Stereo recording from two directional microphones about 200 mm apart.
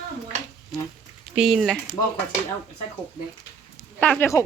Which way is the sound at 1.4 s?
Centre (ahead or behind).